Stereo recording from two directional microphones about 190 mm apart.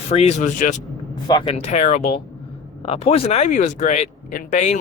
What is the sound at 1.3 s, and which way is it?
Speech, 25° left (ahead or behind).